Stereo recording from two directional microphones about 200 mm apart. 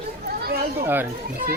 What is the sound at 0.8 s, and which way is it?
Speech, 10° right (ahead or behind).